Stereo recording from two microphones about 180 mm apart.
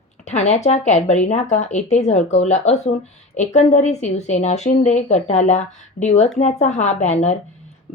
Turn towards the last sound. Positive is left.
turn(degrees=40)  # may be behind; listen again after turning